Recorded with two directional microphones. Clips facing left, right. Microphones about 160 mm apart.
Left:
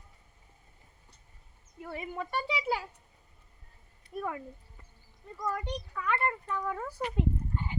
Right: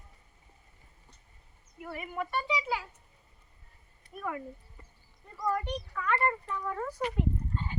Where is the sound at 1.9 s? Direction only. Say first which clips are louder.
Right 1 dB; 25° left (ahead or behind).